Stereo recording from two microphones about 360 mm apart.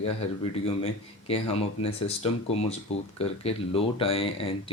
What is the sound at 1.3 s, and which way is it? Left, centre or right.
Speech, centre.